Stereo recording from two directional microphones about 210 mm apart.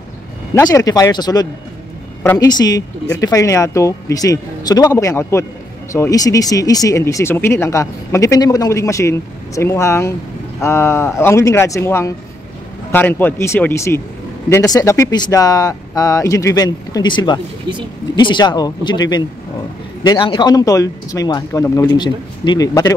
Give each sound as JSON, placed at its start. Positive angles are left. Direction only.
{"t": 0.6, "sound": "speech", "side_deg": 15}